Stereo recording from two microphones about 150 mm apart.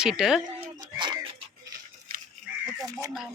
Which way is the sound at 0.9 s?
30° right (ahead or behind).